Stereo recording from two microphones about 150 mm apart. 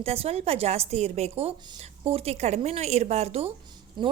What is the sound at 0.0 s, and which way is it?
A woman's voice, 45° right (ahead or behind).